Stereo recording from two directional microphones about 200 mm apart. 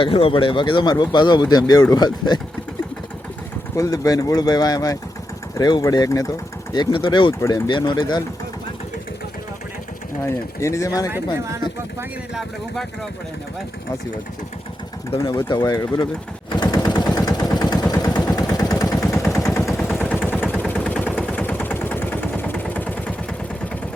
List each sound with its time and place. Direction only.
0.0 s speech: 25° left (ahead or behind)
3.8 s speech: 15° left (ahead or behind)
10.2 s speech: 15° left (ahead or behind)
11.3 s speech: 15° right (ahead or behind)
11.9 s speech: 5° right (ahead or behind)
15.3 s speech: 25° left (ahead or behind)
16.5 s machine gun: 20° left (ahead or behind)
17.9 s vehicle: 20° left (ahead or behind)